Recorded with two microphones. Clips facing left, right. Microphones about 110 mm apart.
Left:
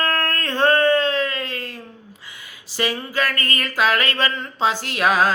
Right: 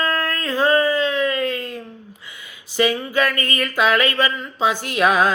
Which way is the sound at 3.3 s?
20° right (ahead or behind).